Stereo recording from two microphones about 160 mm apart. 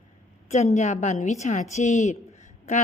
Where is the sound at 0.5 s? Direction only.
45° left (ahead or behind).